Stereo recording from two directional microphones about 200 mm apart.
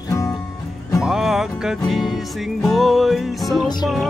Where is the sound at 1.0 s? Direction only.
Centre (ahead or behind).